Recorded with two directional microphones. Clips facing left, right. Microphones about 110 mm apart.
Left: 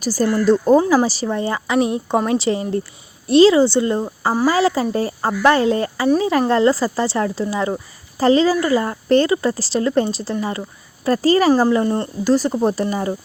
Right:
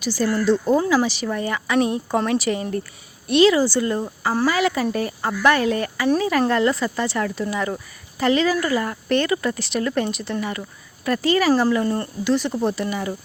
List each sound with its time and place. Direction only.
0.0 s speech: 40° left (ahead or behind)
11.7 s speech: 25° left (ahead or behind)
12.2 s speech: 40° left (ahead or behind)